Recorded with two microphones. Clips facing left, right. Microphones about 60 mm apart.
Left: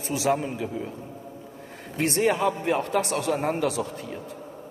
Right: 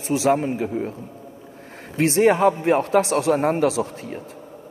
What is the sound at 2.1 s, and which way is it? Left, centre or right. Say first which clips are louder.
A man's voice: right 7 dB; right.